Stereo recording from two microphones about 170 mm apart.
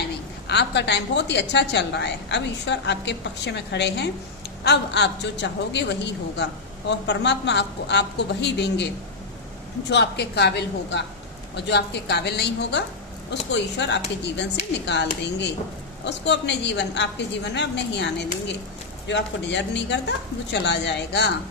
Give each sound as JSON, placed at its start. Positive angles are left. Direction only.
{"t": 0.4, "sound": "a woman's voice", "side_deg": 85}
{"t": 9.9, "sound": "a woman's voice", "side_deg": 85}
{"t": 13.5, "sound": "a woman's voice", "side_deg": 90}
{"t": 15.2, "sound": "a woman's voice", "side_deg": 90}